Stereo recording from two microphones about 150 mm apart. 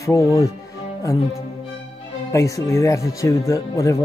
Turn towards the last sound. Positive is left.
turn(degrees=20)  # may be behind; listen again after turning